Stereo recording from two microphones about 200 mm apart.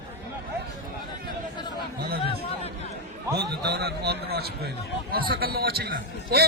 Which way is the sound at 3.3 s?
55° right (ahead or behind).